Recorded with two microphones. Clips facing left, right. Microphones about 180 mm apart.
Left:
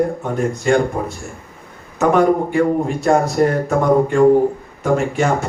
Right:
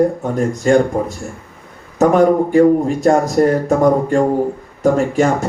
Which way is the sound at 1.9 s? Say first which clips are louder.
Right 3 dB; 40° right (ahead or behind).